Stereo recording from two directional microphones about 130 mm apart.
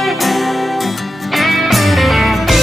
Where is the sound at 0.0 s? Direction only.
Centre (ahead or behind).